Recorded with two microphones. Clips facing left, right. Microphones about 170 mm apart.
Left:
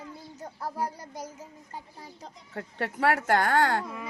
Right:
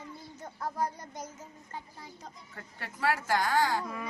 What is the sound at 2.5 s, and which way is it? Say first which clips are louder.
Speech: left 15 dB; 65° left (ahead or behind).